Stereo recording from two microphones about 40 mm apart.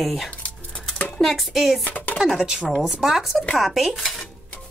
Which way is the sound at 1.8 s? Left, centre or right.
Left.